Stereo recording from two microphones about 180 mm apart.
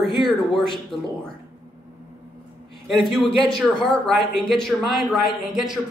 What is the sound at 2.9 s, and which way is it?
Speech, centre (ahead or behind).